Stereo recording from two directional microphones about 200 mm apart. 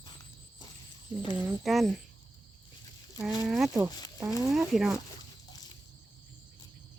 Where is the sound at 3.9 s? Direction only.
20° left (ahead or behind).